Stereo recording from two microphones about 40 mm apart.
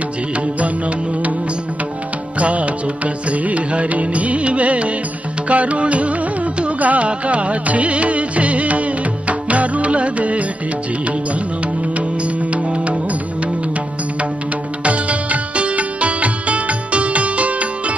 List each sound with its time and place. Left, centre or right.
0.6 s music: right
2.3 s music: right
12.4 s music: right
14.8 s music: right